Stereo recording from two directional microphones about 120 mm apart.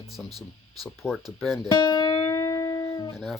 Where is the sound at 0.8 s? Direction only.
Centre (ahead or behind).